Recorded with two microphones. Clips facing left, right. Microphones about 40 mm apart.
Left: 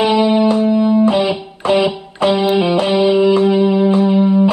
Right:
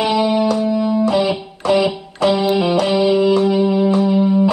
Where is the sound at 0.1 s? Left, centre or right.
Left.